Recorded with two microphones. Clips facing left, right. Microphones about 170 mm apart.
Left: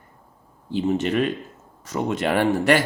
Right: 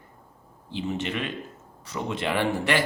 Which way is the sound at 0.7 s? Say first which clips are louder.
Left 8 dB; 45° left (ahead or behind).